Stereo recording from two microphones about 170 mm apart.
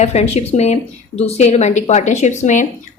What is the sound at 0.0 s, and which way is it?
Speech, 40° left (ahead or behind).